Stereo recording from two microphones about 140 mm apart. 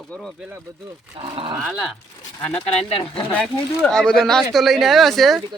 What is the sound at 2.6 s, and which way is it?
Speech, 40° left (ahead or behind).